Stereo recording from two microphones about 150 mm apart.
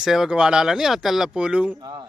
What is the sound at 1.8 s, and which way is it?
Speech, 25° right (ahead or behind).